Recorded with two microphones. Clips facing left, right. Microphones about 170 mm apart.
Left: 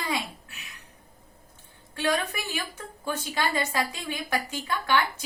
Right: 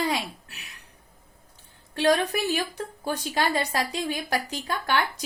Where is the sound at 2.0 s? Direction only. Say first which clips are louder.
Right 5 dB; 35° right (ahead or behind).